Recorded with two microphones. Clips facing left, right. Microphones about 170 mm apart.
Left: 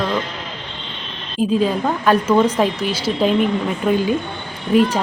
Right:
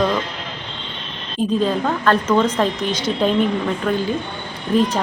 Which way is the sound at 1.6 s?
10° left (ahead or behind).